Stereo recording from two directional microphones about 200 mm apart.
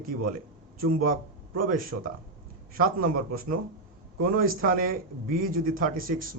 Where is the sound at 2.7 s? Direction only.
45° right (ahead or behind).